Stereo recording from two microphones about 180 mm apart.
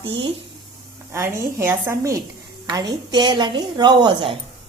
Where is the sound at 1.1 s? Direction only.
15° right (ahead or behind).